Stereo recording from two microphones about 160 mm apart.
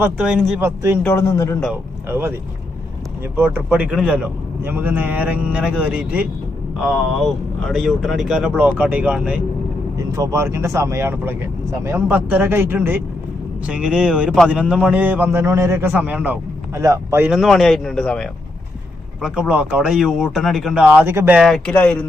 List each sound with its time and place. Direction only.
0.0 s a man's voice: 5° right (ahead or behind)
0.6 s a man's voice: 15° right (ahead or behind)
1.0 s speech: 15° left (ahead or behind)
1.7 s speech: 15° right (ahead or behind)
3.3 s a man's voice: 15° right (ahead or behind)
10.1 s a man's voice: 20° right (ahead or behind)
17.3 s speech: centre (ahead or behind)
19.2 s speech: 5° right (ahead or behind)
21.4 s speech: 5° left (ahead or behind)